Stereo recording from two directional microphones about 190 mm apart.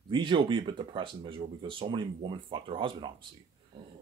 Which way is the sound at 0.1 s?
25° right (ahead or behind).